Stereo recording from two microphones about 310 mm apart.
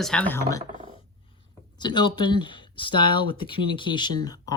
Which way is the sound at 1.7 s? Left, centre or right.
Centre.